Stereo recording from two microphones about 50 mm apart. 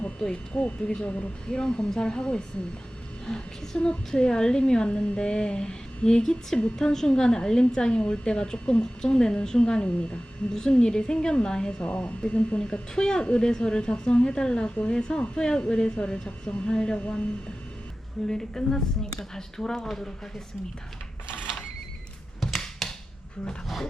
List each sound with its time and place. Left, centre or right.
0.5 s a woman's voice: left
1.5 s a woman's voice: centre
11.9 s a woman's voice: left
18.3 s a woman's voice: centre
22.4 s a sound: centre